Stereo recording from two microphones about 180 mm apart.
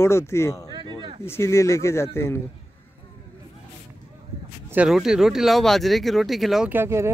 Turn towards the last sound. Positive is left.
turn(degrees=-15)  # may be behind; listen again after turning